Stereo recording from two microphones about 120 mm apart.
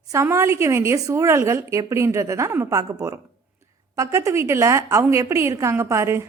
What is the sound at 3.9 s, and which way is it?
A woman's voice, 25° right (ahead or behind).